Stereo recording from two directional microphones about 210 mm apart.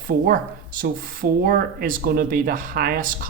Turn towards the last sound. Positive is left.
turn(degrees=-40)  # may be behind; listen again after turning